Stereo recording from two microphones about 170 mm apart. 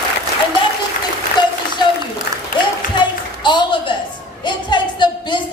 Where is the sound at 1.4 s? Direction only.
25° left (ahead or behind).